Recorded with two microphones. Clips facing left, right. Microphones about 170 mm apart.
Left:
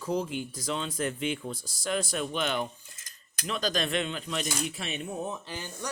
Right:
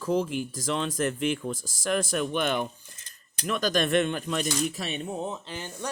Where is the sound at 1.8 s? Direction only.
50° right (ahead or behind).